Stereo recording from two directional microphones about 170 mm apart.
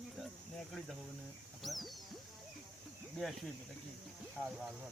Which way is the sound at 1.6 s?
Centre (ahead or behind).